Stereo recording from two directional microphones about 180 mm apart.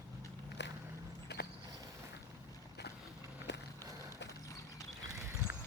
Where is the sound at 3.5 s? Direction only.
75° left (ahead or behind).